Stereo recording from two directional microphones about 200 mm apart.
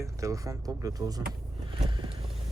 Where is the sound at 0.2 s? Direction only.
15° right (ahead or behind).